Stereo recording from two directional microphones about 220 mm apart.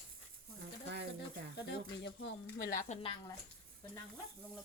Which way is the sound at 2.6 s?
40° left (ahead or behind).